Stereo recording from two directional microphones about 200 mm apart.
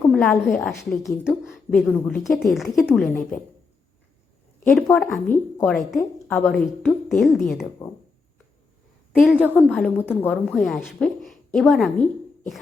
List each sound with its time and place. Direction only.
0.1 s a woman's voice: 5° left (ahead or behind)
4.6 s a woman's voice: 5° left (ahead or behind)
5.1 s a woman's voice: 40° left (ahead or behind)
5.5 s a woman's voice: centre (ahead or behind)
9.1 s a woman's voice: 5° right (ahead or behind)